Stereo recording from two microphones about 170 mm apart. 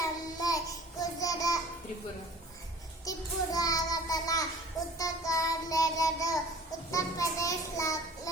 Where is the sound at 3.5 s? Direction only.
20° left (ahead or behind).